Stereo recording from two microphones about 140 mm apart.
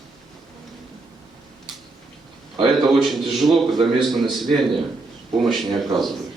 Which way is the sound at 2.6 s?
35° right (ahead or behind).